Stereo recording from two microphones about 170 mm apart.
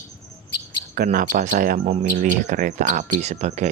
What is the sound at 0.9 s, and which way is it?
Speech, 55° right (ahead or behind).